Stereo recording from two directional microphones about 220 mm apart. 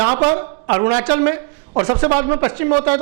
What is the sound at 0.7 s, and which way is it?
A woman's voice, 20° right (ahead or behind).